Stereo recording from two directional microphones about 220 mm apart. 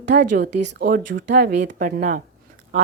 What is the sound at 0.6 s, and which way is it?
A woman's voice, 50° right (ahead or behind).